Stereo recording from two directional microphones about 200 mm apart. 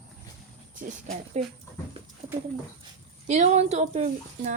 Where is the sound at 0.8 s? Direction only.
40° right (ahead or behind).